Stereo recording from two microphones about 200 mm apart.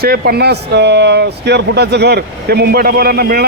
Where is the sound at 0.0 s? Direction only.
50° right (ahead or behind).